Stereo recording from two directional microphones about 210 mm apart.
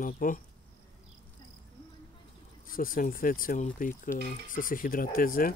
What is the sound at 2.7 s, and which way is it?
Speech, 40° left (ahead or behind).